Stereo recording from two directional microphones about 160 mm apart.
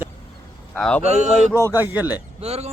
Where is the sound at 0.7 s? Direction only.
5° left (ahead or behind).